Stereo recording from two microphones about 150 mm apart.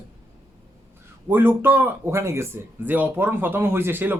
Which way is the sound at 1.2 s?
15° right (ahead or behind).